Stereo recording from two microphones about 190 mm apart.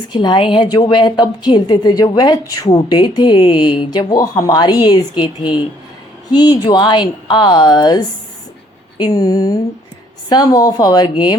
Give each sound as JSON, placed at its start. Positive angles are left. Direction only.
{"t": 0.1, "sound": "a woman's voice", "side_deg": 25}